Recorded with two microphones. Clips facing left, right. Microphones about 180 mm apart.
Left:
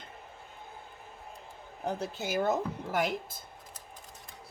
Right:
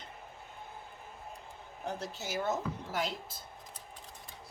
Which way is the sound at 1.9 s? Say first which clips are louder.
Left 5 dB; 55° left (ahead or behind).